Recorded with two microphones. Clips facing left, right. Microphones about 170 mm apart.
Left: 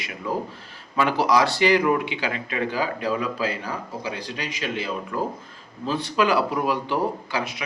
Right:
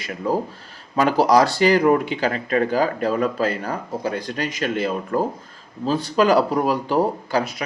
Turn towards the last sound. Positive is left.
turn(degrees=-40)  # may be behind; listen again after turning